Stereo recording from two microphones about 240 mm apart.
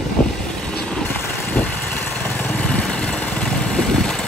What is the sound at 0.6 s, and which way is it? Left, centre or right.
Vehicle, centre.